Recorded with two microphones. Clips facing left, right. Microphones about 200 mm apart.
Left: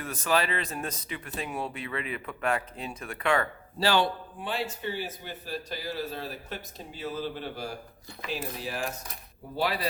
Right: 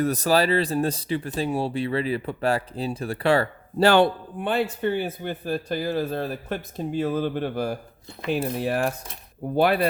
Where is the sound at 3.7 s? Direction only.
55° right (ahead or behind).